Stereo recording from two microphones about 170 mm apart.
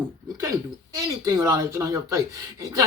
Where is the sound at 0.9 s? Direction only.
20° right (ahead or behind).